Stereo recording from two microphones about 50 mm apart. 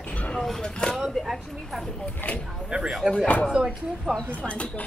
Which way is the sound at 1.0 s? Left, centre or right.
Centre.